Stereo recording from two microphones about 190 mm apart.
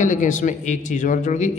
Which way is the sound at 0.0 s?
40° left (ahead or behind).